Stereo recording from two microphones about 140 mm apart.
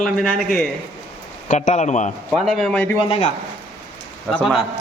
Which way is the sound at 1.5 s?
60° left (ahead or behind).